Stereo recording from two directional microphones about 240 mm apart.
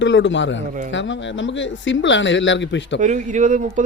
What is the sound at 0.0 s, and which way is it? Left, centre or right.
Speech, left.